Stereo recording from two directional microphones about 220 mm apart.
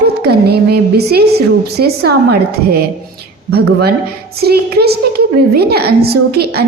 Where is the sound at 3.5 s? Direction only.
45° right (ahead or behind).